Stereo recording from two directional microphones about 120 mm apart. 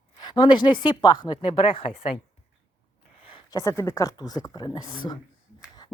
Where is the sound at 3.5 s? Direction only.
25° left (ahead or behind).